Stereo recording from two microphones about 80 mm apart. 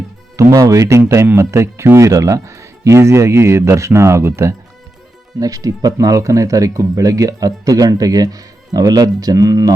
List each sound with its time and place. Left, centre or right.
0.3 s speech: right
5.4 s speech: right